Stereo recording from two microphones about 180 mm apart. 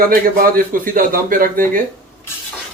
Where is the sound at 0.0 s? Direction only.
55° right (ahead or behind).